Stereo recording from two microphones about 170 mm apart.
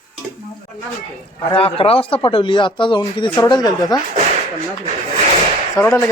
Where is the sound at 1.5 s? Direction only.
35° left (ahead or behind).